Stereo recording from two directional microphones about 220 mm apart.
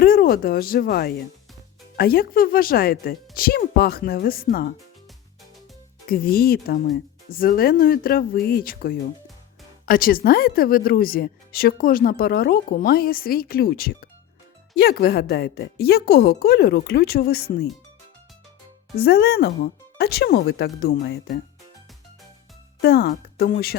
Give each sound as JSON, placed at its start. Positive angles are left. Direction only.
{"t": 0.0, "sound": "speech", "side_deg": 40}
{"t": 6.1, "sound": "speech", "side_deg": 40}
{"t": 18.9, "sound": "speech", "side_deg": 45}
{"t": 22.8, "sound": "speech", "side_deg": 45}